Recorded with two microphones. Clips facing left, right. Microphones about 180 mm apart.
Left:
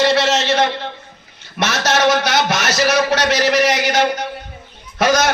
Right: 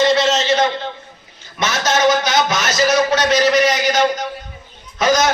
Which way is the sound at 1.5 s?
60° left (ahead or behind).